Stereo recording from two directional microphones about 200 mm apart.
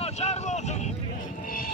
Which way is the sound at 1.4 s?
45° left (ahead or behind).